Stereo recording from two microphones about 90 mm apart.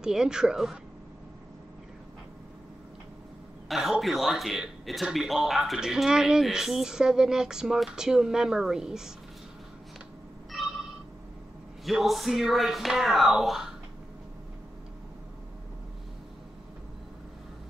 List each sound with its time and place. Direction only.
0.0 s a woman's voice: 5° right (ahead or behind)
3.6 s a sound: centre (ahead or behind)
4.0 s a man's voice: centre (ahead or behind)
10.5 s telephone: 5° right (ahead or behind)
11.8 s a man's voice: centre (ahead or behind)